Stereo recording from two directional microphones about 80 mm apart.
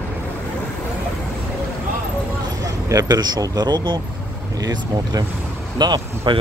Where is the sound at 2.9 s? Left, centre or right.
Right.